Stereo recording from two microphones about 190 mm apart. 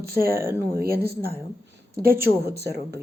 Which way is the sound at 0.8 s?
55° right (ahead or behind).